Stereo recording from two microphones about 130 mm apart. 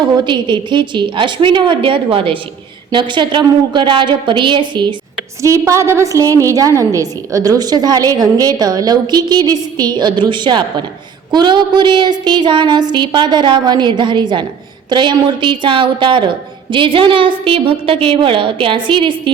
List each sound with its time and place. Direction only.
0.0 s a woman's voice: 35° right (ahead or behind)
5.4 s a woman's voice: 25° right (ahead or behind); by 19.3 s 40° right (ahead or behind)